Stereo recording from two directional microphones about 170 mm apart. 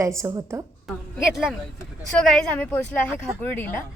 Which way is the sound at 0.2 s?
20° right (ahead or behind).